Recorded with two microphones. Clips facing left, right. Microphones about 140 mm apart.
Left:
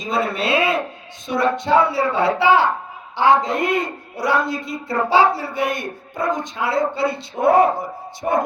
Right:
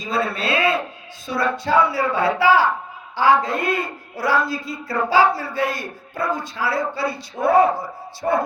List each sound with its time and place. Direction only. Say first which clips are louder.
0.1 s a man's voice: left 2 dB; 25° left (ahead or behind)